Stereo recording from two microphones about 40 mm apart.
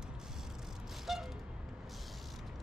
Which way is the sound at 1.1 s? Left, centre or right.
Centre.